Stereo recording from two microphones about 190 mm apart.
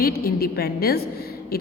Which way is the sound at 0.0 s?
50° left (ahead or behind).